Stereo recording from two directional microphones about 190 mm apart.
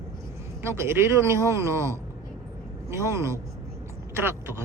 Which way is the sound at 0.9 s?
15° right (ahead or behind).